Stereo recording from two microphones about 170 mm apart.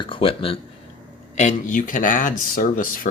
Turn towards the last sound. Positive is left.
turn(degrees=55)  # may be behind; listen again after turning